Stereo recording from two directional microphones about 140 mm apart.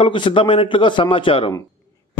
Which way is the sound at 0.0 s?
35° left (ahead or behind).